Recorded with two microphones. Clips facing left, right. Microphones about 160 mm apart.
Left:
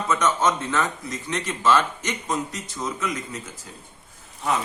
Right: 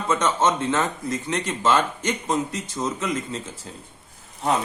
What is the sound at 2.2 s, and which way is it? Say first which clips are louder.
Speech: right 1 dB; 25° right (ahead or behind).